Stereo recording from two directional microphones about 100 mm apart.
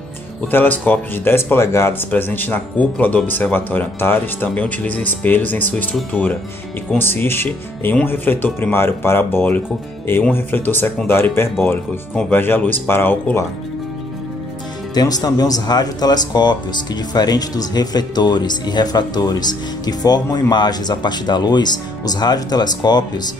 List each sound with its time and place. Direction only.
0.5 s speech: 20° left (ahead or behind)
7.0 s speech: 20° left (ahead or behind)
15.0 s speech: 40° left (ahead or behind)